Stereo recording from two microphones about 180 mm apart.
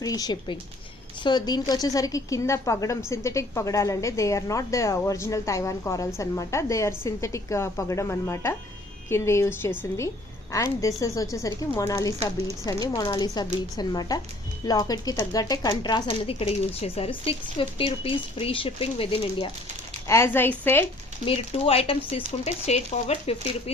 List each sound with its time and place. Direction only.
0.0 s a woman's voice: 20° left (ahead or behind)
20.1 s a woman's voice: 15° left (ahead or behind)
21.2 s speech: 35° left (ahead or behind)